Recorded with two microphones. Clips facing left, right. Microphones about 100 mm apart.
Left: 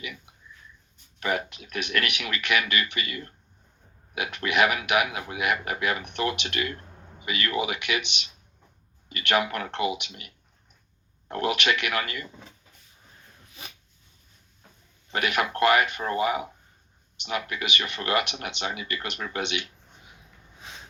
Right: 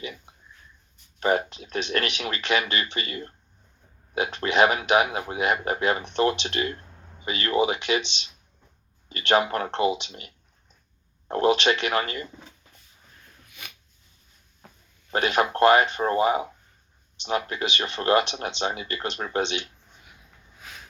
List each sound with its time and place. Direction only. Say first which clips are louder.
1.2 s speech: right 5 dB; 30° right (ahead or behind)
15.1 s speech: right 4 dB; 35° right (ahead or behind)
20.6 s a sound: even; 25° left (ahead or behind)